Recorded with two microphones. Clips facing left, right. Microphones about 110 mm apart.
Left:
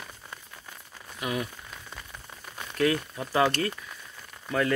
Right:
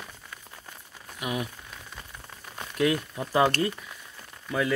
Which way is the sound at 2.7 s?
15° right (ahead or behind).